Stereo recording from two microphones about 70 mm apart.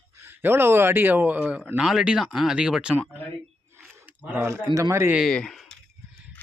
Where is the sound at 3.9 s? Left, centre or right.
Right.